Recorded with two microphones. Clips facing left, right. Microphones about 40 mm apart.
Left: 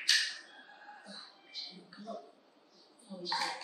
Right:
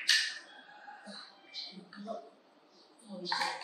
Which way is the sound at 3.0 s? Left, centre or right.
Centre.